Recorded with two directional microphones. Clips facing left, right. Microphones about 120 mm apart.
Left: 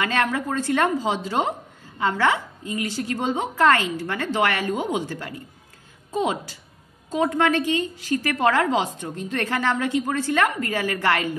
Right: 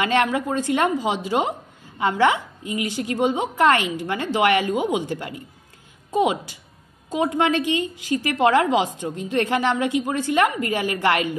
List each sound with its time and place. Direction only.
0.0 s a woman's voice: 20° right (ahead or behind)